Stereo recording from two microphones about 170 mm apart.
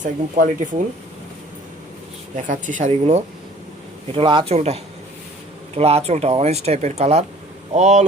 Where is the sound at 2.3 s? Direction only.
50° right (ahead or behind).